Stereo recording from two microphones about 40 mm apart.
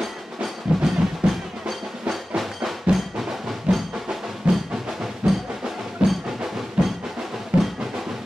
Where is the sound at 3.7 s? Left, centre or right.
Centre.